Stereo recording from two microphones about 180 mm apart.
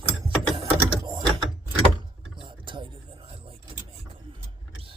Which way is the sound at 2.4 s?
25° right (ahead or behind).